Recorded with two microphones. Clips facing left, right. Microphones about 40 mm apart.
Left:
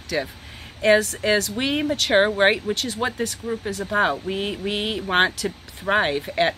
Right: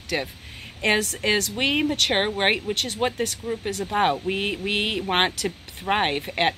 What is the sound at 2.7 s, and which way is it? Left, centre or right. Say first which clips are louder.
Speech: left 1 dB; right.